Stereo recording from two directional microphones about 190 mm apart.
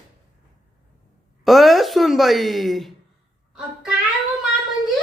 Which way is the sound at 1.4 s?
Centre (ahead or behind).